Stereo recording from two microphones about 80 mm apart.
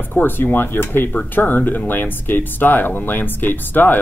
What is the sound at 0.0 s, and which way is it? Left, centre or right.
Speech, left.